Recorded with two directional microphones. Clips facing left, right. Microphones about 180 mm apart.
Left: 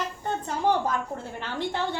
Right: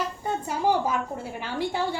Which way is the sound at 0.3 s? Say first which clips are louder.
Even; 10° right (ahead or behind).